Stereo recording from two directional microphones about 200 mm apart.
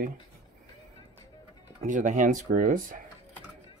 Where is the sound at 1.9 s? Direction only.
40° right (ahead or behind).